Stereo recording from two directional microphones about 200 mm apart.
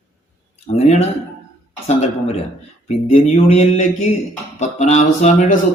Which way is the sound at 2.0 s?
35° left (ahead or behind).